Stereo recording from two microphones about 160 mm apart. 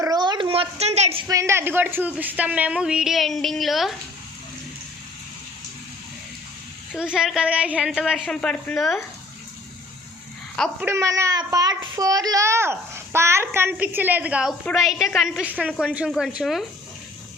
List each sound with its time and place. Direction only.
0.0 s a sound: 25° right (ahead or behind); by 1.2 s 45° right (ahead or behind)
1.3 s a child's voice: 20° right (ahead or behind); by 3.9 s centre (ahead or behind)
6.9 s a woman's voice: 5° right (ahead or behind)
10.8 s a child's voice: 15° right (ahead or behind); by 16.6 s centre (ahead or behind)